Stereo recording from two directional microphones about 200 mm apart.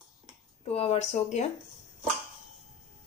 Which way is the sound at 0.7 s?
30° left (ahead or behind).